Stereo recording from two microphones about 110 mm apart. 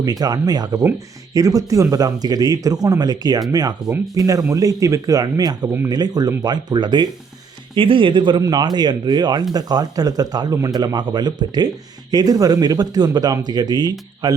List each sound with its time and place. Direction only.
0.0 s speech: 35° right (ahead or behind)